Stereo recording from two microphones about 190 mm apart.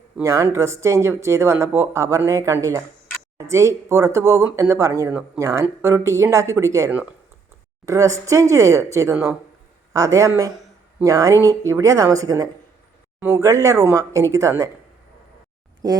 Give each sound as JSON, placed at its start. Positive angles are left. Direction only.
{"t": 0.2, "sound": "speech", "side_deg": -15}
{"t": 15.8, "sound": "speech", "side_deg": -20}